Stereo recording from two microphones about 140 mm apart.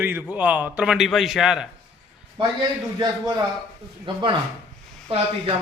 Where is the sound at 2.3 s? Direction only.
30° right (ahead or behind).